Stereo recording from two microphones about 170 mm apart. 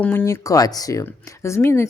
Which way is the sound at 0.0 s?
10° left (ahead or behind).